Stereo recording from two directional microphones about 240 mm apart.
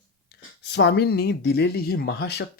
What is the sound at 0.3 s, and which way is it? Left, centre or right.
Speech, left.